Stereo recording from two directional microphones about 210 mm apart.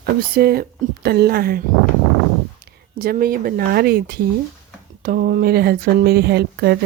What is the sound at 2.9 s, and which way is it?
Speech, 45° right (ahead or behind).